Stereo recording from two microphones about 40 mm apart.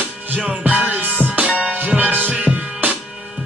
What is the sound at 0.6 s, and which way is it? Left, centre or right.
Music, right.